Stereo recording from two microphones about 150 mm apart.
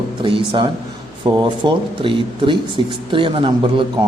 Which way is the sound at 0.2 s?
35° right (ahead or behind).